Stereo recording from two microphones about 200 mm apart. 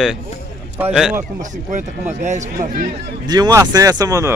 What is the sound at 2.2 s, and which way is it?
Speech, 35° right (ahead or behind).